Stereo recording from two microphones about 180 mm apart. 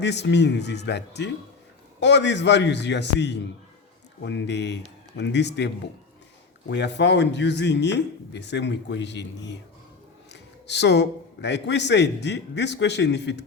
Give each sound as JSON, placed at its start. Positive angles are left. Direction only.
{"t": 0.0, "sound": "speech", "side_deg": 75}